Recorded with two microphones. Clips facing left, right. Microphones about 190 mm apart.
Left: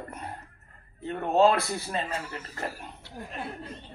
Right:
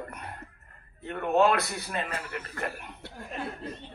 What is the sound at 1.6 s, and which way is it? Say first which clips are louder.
Speech: left 2 dB; 60° right (ahead or behind).